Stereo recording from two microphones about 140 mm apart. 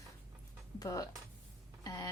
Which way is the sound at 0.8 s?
25° left (ahead or behind).